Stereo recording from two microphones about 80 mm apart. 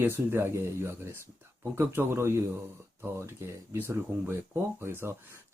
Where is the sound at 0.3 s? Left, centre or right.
Right.